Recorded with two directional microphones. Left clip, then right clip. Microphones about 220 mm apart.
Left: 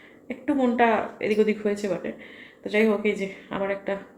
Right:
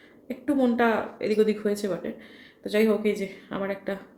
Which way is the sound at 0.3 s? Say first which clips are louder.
Even; 10° right (ahead or behind).